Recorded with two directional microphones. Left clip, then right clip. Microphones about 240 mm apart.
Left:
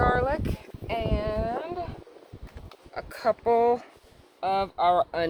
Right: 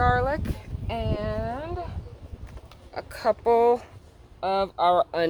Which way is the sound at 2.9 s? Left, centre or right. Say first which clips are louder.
Right 1 dB; right.